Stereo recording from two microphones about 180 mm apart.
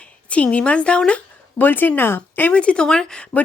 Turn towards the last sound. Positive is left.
turn(degrees=5)  # may be behind; listen again after turning